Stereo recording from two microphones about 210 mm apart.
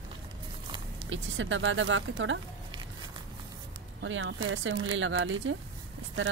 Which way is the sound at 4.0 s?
65° right (ahead or behind).